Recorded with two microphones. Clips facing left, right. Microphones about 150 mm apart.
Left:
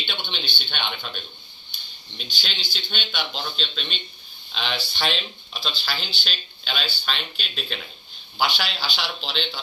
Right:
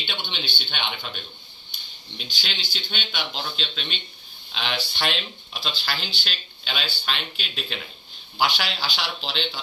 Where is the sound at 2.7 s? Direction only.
5° right (ahead or behind).